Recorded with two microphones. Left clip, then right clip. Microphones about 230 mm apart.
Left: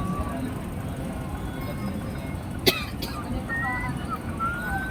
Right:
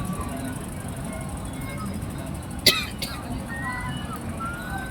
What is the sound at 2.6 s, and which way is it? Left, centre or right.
Cough, centre.